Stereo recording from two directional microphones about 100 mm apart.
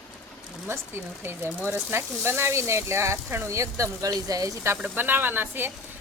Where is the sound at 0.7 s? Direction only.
25° right (ahead or behind).